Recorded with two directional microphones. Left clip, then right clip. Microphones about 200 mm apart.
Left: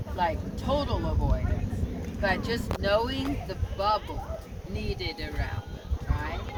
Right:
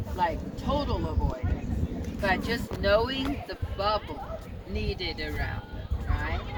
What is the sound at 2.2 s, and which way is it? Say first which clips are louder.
Speech: even; 55° left (ahead or behind).